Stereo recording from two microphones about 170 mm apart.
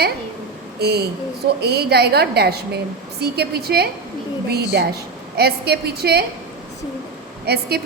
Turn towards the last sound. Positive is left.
turn(degrees=-70)  # may be behind; listen again after turning